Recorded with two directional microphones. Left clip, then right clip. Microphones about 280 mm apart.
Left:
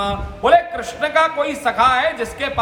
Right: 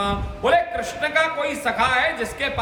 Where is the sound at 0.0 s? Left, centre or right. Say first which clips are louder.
Left 3 dB; centre.